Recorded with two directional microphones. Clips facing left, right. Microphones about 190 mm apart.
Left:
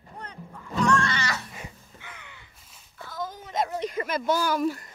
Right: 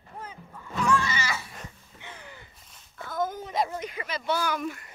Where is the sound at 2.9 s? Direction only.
50° right (ahead or behind).